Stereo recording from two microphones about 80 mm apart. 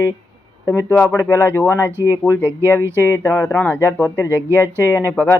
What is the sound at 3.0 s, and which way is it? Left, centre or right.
Speech, left.